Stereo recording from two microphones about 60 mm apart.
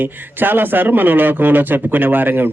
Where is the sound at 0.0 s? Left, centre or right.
Right.